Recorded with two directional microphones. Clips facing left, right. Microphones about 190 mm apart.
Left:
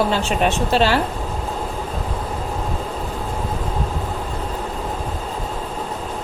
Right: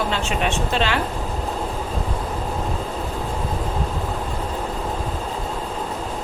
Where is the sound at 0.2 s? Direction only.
35° left (ahead or behind).